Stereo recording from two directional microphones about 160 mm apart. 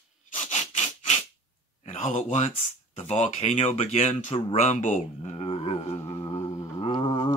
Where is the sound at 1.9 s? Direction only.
50° left (ahead or behind).